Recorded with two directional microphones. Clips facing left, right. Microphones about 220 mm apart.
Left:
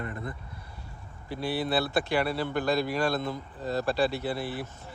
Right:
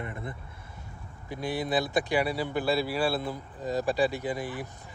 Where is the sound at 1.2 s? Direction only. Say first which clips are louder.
Left 1 dB; 15° right (ahead or behind).